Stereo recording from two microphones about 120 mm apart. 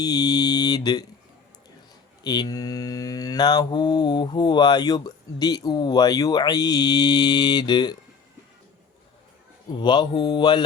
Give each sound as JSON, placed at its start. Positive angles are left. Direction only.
{"t": 0.0, "sound": "mantra", "side_deg": 35}
{"t": 2.2, "sound": "mantra", "side_deg": 35}
{"t": 9.7, "sound": "mantra", "side_deg": 40}